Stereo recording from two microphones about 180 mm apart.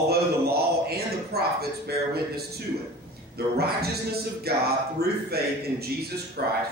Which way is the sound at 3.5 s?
60° right (ahead or behind).